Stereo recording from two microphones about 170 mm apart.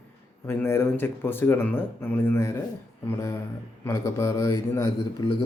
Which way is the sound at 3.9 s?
15° left (ahead or behind).